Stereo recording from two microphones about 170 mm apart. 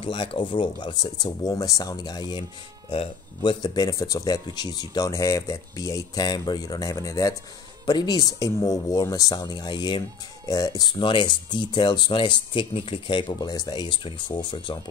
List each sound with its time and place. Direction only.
0.0 s speech: 30° left (ahead or behind)